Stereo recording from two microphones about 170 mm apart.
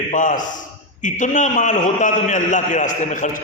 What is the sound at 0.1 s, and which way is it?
A man's voice, 50° left (ahead or behind).